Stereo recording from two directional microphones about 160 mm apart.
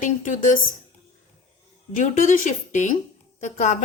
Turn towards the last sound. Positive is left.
turn(degrees=50)  # may be behind; listen again after turning